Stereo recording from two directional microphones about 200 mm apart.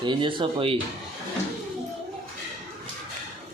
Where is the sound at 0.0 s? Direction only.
25° right (ahead or behind).